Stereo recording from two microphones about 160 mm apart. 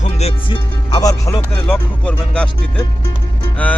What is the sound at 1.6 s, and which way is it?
Speech, 5° left (ahead or behind).